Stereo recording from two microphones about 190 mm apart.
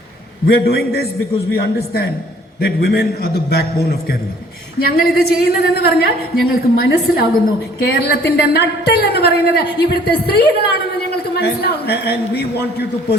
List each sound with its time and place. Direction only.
0.4 s a woman's voice: 55° left (ahead or behind)